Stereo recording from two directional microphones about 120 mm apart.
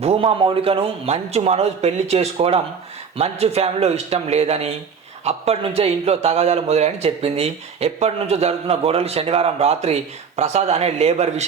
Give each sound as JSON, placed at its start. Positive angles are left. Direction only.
{"t": 0.0, "sound": "a man's voice", "side_deg": -50}